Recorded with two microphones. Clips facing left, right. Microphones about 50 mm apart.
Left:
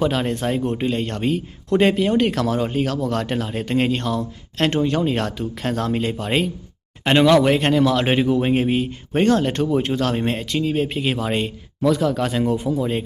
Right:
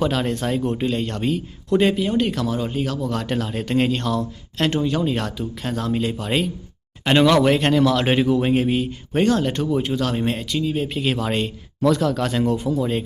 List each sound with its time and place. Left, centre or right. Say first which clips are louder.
0.0 s speech: left 1 dB; left
3.2 s a man's voice: even; left
4.5 s speech: left 2 dB; left
7.1 s a man's voice: left 1 dB; centre; by 10.9 s left
11.0 s a man's voice: even; centre